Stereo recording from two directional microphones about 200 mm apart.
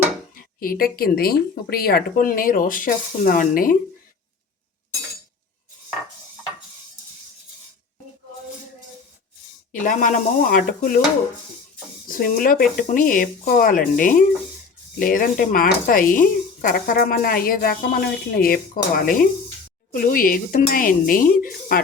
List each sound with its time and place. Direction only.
0.3 s speech: 45° left (ahead or behind)
9.8 s speech: 40° left (ahead or behind)
12.0 s speech: 45° left (ahead or behind)